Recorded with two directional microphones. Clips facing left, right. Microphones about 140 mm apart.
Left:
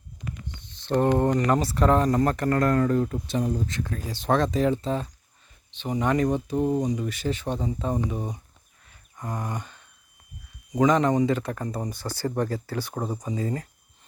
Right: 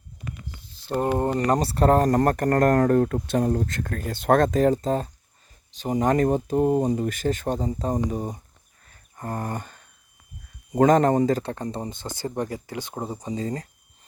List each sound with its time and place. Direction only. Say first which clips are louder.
0.4 s a sound: left 2 dB; 5° right (ahead or behind)
1.4 s speech: right 1 dB; 35° right (ahead or behind)
8.9 s a sound: right 2 dB; 50° right (ahead or behind)
10.7 s speech: right 3 dB; 50° right (ahead or behind)
11.3 s speech: right 1 dB; 30° right (ahead or behind)
13.2 s speech: even; 30° right (ahead or behind)